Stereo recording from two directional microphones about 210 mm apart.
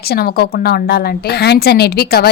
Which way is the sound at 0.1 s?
50° left (ahead or behind).